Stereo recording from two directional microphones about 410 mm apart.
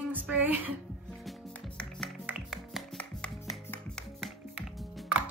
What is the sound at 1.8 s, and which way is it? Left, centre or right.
Music, centre.